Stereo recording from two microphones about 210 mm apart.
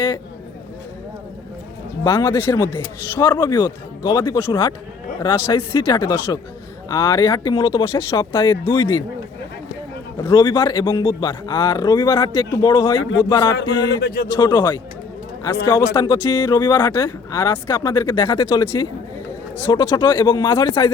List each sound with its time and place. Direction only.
2.0 s speech: 20° left (ahead or behind)
10.3 s speech: 20° left (ahead or behind)
13.8 s speech: 50° left (ahead or behind)
14.3 s speech: 20° left (ahead or behind)
15.8 s speech: 15° left (ahead or behind)